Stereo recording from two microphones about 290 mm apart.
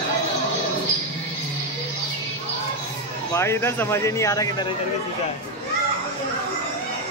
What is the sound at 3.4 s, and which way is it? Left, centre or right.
Speech, centre.